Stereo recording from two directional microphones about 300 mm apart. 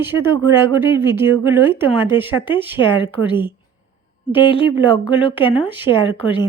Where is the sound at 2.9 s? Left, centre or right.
Centre.